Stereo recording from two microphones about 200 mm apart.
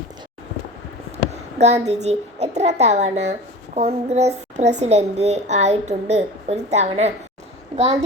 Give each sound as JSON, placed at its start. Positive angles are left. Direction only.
{"t": 1.3, "sound": "a child's voice", "side_deg": -35}